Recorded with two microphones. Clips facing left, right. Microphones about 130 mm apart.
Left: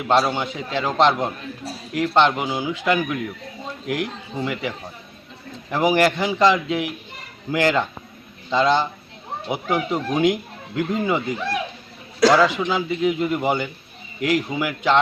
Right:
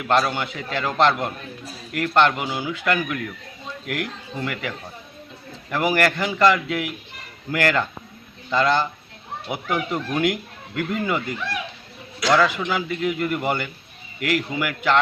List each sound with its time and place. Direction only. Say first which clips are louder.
0.0 s a man's voice: left 2 dB; 20° left (ahead or behind)
5.7 s a man's voice: left 3 dB; 15° left (ahead or behind)